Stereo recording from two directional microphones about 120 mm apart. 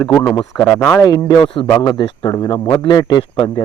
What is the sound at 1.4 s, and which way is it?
Speech, 45° left (ahead or behind).